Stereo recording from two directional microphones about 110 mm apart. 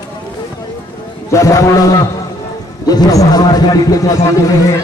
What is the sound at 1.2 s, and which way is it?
A man's voice, 30° left (ahead or behind).